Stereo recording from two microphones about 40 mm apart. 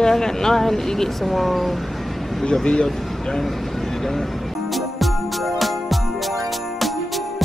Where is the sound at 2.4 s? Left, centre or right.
Left.